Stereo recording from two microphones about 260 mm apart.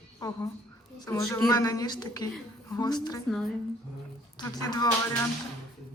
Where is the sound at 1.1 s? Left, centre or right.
Centre.